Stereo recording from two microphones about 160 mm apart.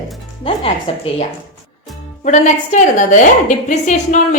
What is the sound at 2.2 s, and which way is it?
A woman's voice, 50° left (ahead or behind).